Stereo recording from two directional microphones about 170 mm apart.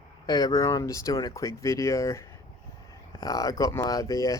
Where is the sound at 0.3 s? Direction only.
20° left (ahead or behind).